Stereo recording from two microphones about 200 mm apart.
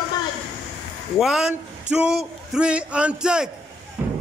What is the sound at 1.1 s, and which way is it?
A man's voice, centre (ahead or behind).